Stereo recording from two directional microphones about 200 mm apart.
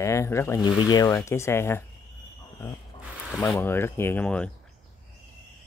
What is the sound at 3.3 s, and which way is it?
Speech, 5° left (ahead or behind).